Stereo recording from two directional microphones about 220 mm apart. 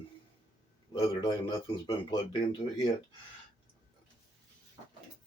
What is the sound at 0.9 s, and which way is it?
Speech, 20° left (ahead or behind).